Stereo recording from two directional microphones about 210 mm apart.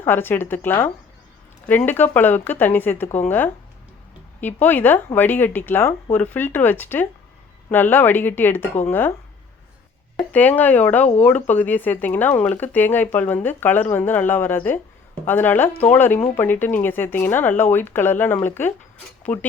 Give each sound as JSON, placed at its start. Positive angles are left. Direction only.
{"t": 0.0, "sound": "speech", "side_deg": 10}
{"t": 10.2, "sound": "speech", "side_deg": 10}
{"t": 19.3, "sound": "speech", "side_deg": 30}